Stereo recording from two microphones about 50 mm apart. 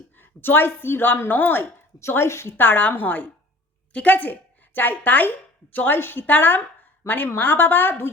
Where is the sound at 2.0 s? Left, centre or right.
Left.